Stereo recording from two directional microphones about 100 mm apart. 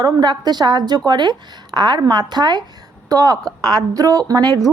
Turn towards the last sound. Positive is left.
turn(degrees=-40)  # may be behind; listen again after turning